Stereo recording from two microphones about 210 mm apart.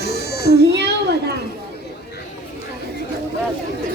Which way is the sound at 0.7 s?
50° right (ahead or behind).